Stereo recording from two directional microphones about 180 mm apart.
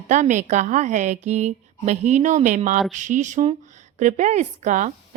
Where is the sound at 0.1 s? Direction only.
40° right (ahead or behind).